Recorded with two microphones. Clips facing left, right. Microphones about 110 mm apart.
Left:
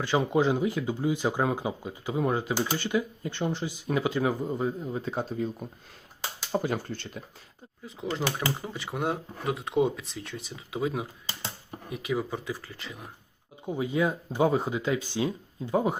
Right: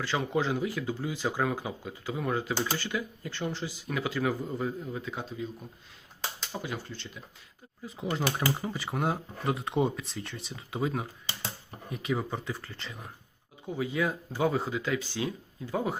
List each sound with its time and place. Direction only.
0.3 s speech: 15° left (ahead or behind); by 5.5 s 40° left (ahead or behind)
6.5 s speech: 45° left (ahead or behind)
7.9 s speech: centre (ahead or behind)
13.7 s speech: 20° left (ahead or behind)